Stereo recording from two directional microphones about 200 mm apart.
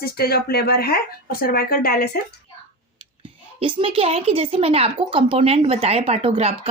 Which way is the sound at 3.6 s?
25° right (ahead or behind).